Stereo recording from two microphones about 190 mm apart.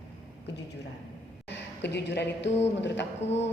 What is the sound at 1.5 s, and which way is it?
A woman's voice, 65° left (ahead or behind).